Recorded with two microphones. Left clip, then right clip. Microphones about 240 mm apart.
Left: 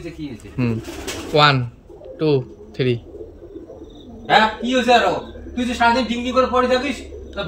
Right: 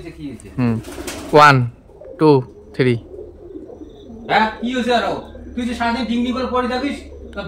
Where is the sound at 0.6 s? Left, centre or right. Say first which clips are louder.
Right 2 dB; centre.